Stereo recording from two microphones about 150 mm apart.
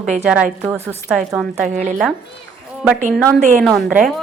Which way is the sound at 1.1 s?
Centre (ahead or behind).